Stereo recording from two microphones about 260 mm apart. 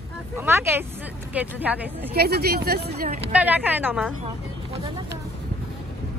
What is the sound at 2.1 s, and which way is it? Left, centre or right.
Speech, right.